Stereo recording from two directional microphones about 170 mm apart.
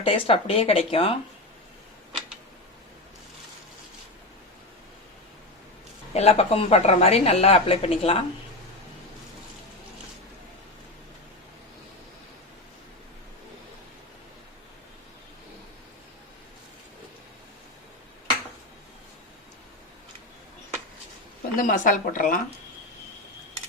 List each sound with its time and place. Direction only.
0.0 s speech: 35° left (ahead or behind)
6.1 s speech: 35° left (ahead or behind)
21.5 s speech: 55° left (ahead or behind)